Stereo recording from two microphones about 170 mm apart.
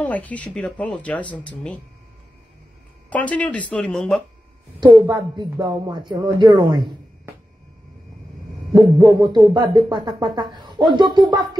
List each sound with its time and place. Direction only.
0.0 s speech: 10° left (ahead or behind)
3.1 s speech: 10° left (ahead or behind)
4.8 s speech: 20° right (ahead or behind)
8.7 s speech: 20° right (ahead or behind)